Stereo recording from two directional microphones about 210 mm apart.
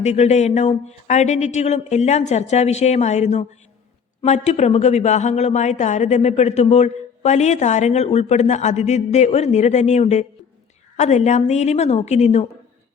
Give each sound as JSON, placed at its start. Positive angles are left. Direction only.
{"t": 0.0, "sound": "a woman's voice", "side_deg": 30}